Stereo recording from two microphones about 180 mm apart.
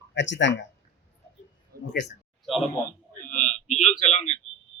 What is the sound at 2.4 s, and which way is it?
Speech, centre (ahead or behind).